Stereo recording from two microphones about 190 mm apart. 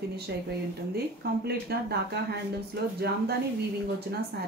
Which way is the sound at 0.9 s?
55° right (ahead or behind).